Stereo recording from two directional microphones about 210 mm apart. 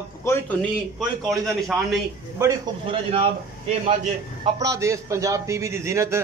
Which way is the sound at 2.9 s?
25° right (ahead or behind).